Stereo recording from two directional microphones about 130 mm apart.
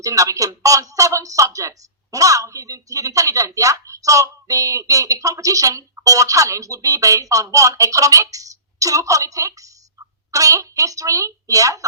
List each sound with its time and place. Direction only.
0.0 s speech: 25° right (ahead or behind)